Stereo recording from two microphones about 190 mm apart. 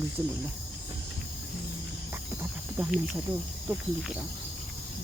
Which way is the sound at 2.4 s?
10° right (ahead or behind).